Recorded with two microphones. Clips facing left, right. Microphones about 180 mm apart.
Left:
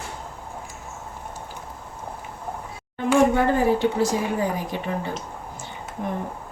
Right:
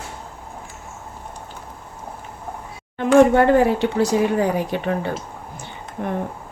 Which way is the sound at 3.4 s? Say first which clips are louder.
Right 4 dB; 70° right (ahead or behind).